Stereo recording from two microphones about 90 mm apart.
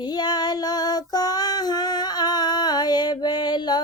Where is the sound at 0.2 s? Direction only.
50° left (ahead or behind).